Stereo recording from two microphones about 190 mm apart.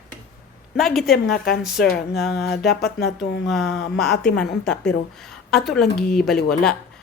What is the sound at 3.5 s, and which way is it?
A woman's voice, centre (ahead or behind).